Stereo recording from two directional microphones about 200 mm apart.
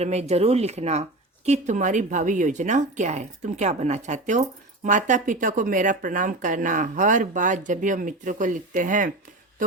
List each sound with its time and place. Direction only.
0.0 s speech: 35° right (ahead or behind)